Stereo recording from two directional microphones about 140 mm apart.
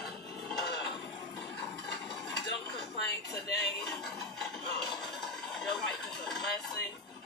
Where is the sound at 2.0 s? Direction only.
5° left (ahead or behind).